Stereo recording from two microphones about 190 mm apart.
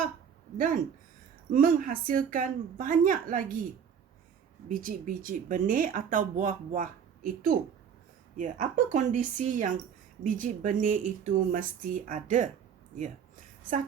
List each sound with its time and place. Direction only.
0.5 s speech: 45° right (ahead or behind)
4.7 s a woman's voice: 45° right (ahead or behind)